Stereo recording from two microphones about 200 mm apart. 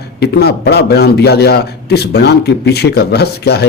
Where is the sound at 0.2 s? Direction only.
55° left (ahead or behind).